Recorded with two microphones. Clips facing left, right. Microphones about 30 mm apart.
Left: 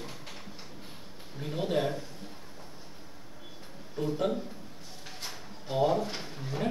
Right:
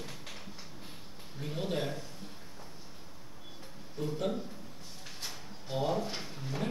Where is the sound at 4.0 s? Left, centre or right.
Centre.